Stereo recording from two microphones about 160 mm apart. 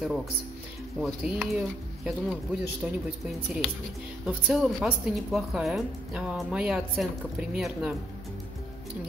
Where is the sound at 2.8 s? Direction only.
5° right (ahead or behind).